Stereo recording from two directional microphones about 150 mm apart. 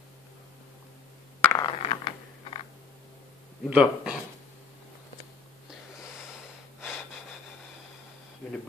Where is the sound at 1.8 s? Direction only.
40° left (ahead or behind).